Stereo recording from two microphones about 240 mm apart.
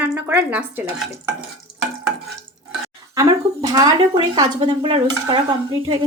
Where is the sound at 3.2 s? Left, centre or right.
Centre.